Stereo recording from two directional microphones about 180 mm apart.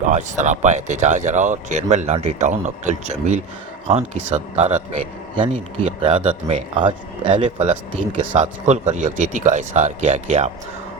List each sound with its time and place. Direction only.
0.0 s speech: 40° right (ahead or behind)
5.3 s speech: 25° right (ahead or behind)
7.6 s speech: 40° right (ahead or behind)